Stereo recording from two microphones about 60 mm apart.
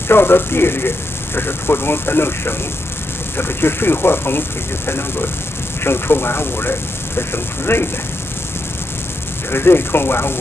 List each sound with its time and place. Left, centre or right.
0.1 s speech: left
9.5 s speech: left